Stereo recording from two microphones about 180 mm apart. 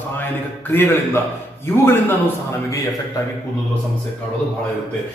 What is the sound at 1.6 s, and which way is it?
Speech, 15° left (ahead or behind).